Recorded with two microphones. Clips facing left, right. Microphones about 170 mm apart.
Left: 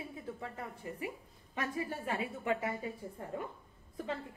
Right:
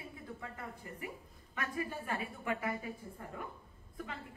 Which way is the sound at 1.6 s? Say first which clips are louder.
Left 2 dB; 25° left (ahead or behind).